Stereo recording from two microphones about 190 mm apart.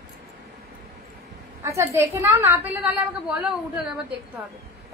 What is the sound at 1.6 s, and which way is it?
A woman's voice, 15° right (ahead or behind).